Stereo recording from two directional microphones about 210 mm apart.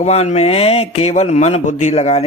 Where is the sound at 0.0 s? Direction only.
30° left (ahead or behind).